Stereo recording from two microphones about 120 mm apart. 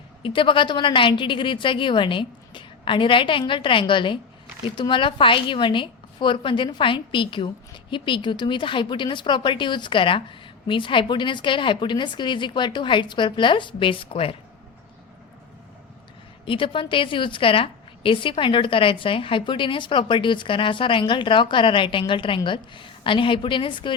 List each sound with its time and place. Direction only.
0.2 s a woman's voice: 45° left (ahead or behind)
16.5 s a woman's voice: 45° left (ahead or behind)